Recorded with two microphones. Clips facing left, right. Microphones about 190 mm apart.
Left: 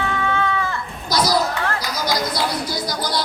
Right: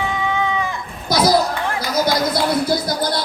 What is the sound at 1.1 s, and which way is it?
Speech, 55° right (ahead or behind).